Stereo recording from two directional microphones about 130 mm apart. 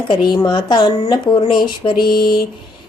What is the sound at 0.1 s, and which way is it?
Speech, 35° left (ahead or behind).